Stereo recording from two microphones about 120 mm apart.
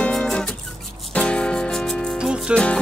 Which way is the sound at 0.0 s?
5° left (ahead or behind).